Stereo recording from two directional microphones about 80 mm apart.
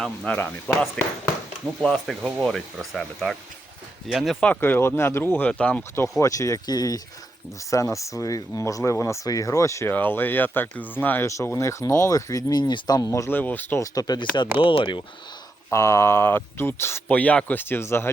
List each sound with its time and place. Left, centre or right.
0.3 s speech: left
1.0 s speech: centre
4.6 s speech: left
6.0 s speech: left
7.7 s speech: left
9.9 s speech: left
11.3 s speech: left
13.3 s speech: left
13.7 s speech: left
14.6 s speech: left
15.7 s speech: left
17.1 s speech: centre